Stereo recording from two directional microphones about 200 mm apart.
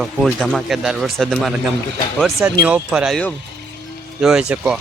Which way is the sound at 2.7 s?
5° right (ahead or behind).